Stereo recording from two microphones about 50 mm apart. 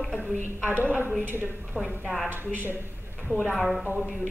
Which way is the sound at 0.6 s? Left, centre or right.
Right.